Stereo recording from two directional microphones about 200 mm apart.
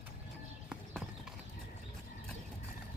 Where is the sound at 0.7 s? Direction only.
Centre (ahead or behind).